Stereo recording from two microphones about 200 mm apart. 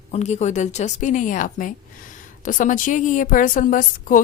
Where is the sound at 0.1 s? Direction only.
35° left (ahead or behind).